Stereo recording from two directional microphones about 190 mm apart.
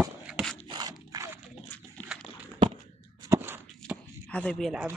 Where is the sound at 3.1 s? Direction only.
15° right (ahead or behind).